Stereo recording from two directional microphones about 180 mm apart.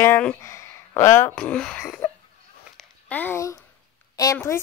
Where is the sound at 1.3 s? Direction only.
5° left (ahead or behind).